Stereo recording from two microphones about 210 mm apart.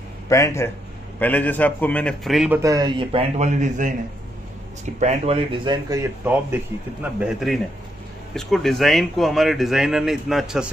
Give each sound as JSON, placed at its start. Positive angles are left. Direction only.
{"t": 0.3, "sound": "a man's voice", "side_deg": 15}
{"t": 2.6, "sound": "a man's voice", "side_deg": -15}